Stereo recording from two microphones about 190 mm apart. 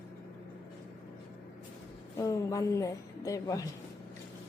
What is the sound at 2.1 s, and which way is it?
Speech, 15° left (ahead or behind).